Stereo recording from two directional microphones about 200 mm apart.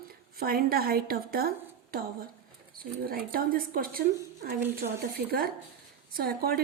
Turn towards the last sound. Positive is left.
turn(degrees=-50)  # may be behind; listen again after turning